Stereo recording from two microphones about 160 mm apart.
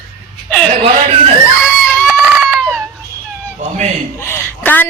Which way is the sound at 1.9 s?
10° left (ahead or behind).